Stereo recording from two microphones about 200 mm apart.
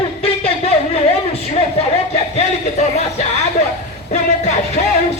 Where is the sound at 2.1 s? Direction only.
30° left (ahead or behind).